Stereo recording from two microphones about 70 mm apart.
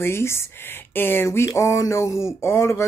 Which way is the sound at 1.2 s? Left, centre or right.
Left.